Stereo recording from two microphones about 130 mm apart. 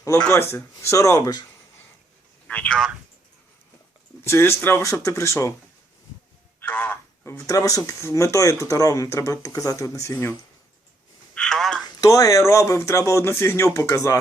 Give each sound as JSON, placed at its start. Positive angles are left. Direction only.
{"t": 0.3, "sound": "speech", "side_deg": 20}
{"t": 2.5, "sound": "speech", "side_deg": 10}
{"t": 4.2, "sound": "speech", "side_deg": 20}
{"t": 6.6, "sound": "speech", "side_deg": 15}
{"t": 11.3, "sound": "telephone", "side_deg": 5}
{"t": 11.9, "sound": "speech", "side_deg": 25}